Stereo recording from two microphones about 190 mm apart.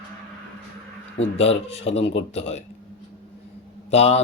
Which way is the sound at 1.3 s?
30° left (ahead or behind).